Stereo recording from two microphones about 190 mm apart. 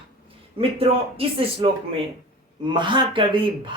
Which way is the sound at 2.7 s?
25° right (ahead or behind).